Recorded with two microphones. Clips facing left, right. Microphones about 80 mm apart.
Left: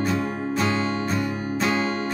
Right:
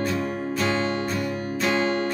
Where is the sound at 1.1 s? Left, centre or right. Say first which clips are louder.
Left 2 dB; left.